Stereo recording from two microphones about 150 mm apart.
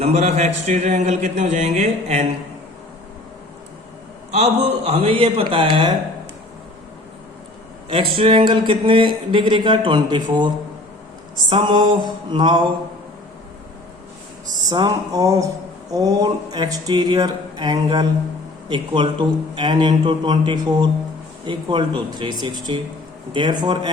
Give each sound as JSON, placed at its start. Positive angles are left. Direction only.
{"t": 0.0, "sound": "speech", "side_deg": -45}
{"t": 4.3, "sound": "speech", "side_deg": -45}
{"t": 7.9, "sound": "speech", "side_deg": -40}
{"t": 14.7, "sound": "a sound", "side_deg": -25}
{"t": 18.7, "sound": "speech", "side_deg": -30}
{"t": 23.3, "sound": "a sound", "side_deg": -30}